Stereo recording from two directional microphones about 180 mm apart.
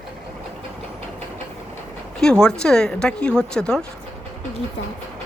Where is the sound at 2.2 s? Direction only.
5° left (ahead or behind).